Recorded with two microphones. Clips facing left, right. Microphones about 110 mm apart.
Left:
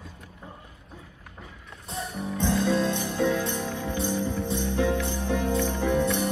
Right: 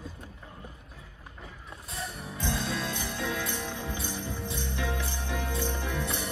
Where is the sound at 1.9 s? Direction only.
25° left (ahead or behind).